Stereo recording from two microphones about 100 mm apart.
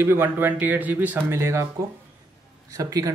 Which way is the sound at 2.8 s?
35° right (ahead or behind).